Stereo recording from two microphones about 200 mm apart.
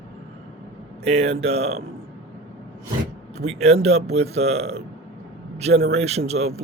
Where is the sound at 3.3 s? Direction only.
30° right (ahead or behind).